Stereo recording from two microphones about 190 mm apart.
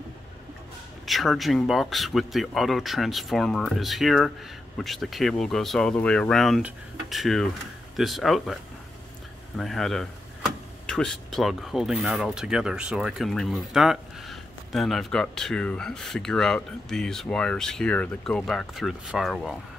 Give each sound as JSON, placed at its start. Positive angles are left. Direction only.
{"t": 1.0, "sound": "speech", "side_deg": 0}
{"t": 9.6, "sound": "speech", "side_deg": 0}